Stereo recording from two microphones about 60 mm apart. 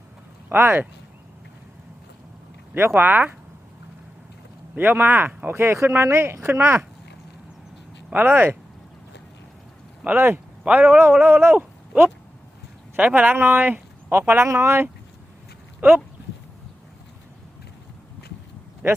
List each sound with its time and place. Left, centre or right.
0.5 s a man's voice: right
2.7 s a man's voice: right
3.1 s speech: right
4.8 s a man's voice: right
6.0 s speech: right
8.1 s a man's voice: right
10.2 s a man's voice: right
10.7 s a man's voice: right
14.1 s speech: right
15.8 s a man's voice: right
18.8 s speech: right